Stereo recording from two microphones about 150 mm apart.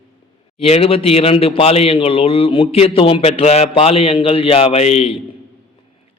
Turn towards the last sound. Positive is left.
turn(degrees=40)  # may be behind; listen again after turning